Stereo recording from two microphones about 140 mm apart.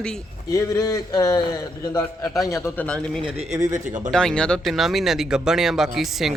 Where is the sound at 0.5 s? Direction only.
25° left (ahead or behind).